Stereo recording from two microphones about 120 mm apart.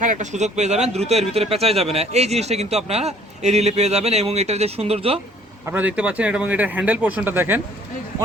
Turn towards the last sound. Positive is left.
turn(degrees=-15)  # may be behind; listen again after turning